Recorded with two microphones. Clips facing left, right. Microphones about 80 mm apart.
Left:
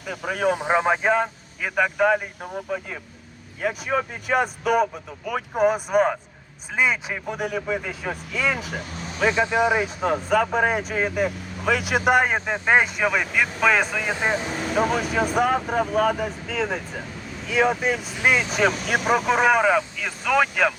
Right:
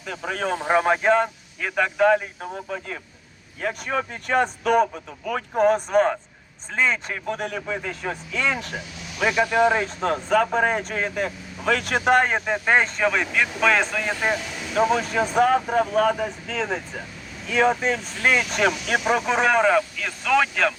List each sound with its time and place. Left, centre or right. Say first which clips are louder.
0.0 s speech: left 3 dB; centre
8.8 s vehicle: left 3 dB; left
9.2 s speech: right 1 dB; left; by 14.1 s centre
14.1 s speech: even; centre
14.4 s vehicle: left 6 dB; left
14.8 s speech: right 2 dB; centre
18.9 s speech: left 1 dB; centre